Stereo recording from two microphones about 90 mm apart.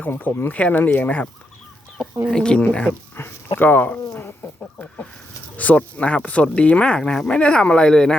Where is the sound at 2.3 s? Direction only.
10° left (ahead or behind).